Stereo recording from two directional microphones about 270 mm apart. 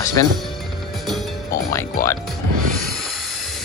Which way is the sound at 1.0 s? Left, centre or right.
Centre.